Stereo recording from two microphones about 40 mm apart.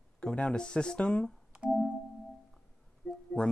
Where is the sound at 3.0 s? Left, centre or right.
Left.